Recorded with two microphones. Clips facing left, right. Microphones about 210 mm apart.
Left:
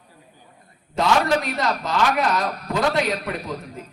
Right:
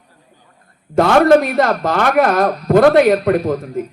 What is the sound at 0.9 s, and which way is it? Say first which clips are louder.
Speech: right 10 dB; 55° right (ahead or behind).